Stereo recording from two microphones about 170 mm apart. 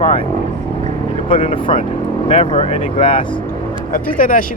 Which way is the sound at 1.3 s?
30° left (ahead or behind).